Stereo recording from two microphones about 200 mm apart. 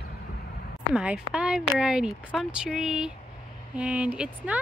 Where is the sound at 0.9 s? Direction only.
5° right (ahead or behind).